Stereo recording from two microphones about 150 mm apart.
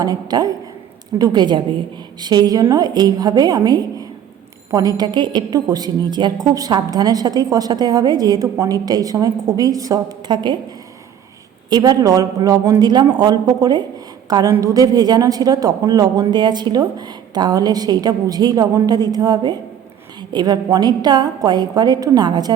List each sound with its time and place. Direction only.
0.0 s a woman's voice: 25° right (ahead or behind)
11.7 s a woman's voice: 25° right (ahead or behind)